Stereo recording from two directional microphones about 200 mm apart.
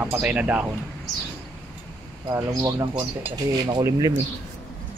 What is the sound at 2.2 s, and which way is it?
Speech, 20° right (ahead or behind).